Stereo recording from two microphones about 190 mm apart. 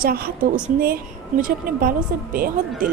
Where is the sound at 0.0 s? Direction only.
55° right (ahead or behind).